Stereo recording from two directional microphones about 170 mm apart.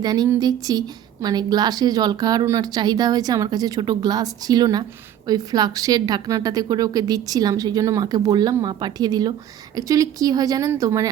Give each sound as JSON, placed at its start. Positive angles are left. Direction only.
{"t": 0.0, "sound": "a woman's voice", "side_deg": -25}